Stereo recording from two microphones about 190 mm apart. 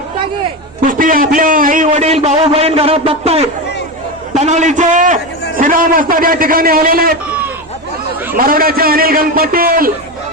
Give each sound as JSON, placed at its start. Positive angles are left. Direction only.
{"t": 0.9, "sound": "a man's voice", "side_deg": -45}
{"t": 8.4, "sound": "a man's voice", "side_deg": -50}